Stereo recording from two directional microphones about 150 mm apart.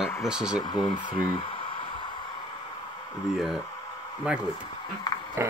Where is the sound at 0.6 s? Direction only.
30° left (ahead or behind).